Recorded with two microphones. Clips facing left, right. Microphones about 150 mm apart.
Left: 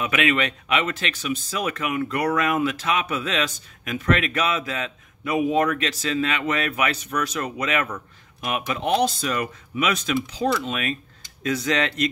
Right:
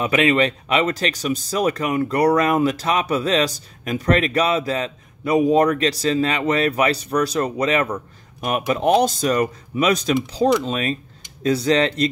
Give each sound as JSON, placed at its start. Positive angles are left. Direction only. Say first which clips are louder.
{"t": 0.0, "sound": "speech", "louder": "right 5 dB", "side_deg": -35}